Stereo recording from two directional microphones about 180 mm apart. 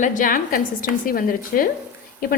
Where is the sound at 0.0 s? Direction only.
45° left (ahead or behind).